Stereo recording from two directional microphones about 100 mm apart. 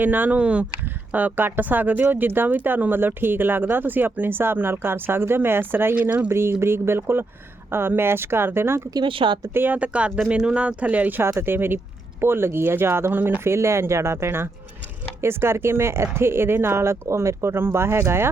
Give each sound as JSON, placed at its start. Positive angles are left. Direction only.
{"t": 0.0, "sound": "speech", "side_deg": -15}
{"t": 9.0, "sound": "a woman's voice", "side_deg": -60}
{"t": 9.5, "sound": "speech", "side_deg": -20}